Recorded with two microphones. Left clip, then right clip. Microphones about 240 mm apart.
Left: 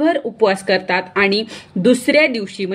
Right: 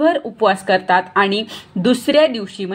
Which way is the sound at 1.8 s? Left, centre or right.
Centre.